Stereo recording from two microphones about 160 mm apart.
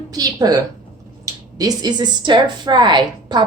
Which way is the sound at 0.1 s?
25° right (ahead or behind).